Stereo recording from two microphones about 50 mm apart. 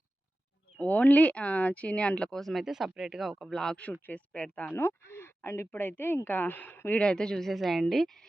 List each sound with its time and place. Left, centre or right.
0.8 s speech: left
2.3 s speech: centre
3.5 s speech: centre
4.7 s speech: left
7.0 s speech: centre